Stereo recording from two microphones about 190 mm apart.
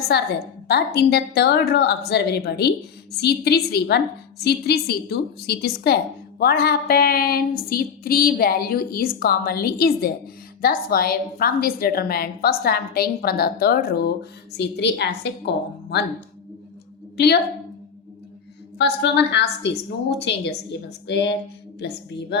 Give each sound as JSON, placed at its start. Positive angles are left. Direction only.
{"t": 0.1, "sound": "a woman's voice", "side_deg": 60}
{"t": 6.4, "sound": "a sound", "side_deg": 55}
{"t": 14.5, "sound": "a woman's voice", "side_deg": 65}
{"t": 18.8, "sound": "a woman's voice", "side_deg": 65}